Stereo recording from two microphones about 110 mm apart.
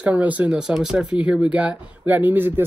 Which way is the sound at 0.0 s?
15° right (ahead or behind).